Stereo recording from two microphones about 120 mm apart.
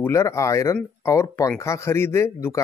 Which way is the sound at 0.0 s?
20° left (ahead or behind).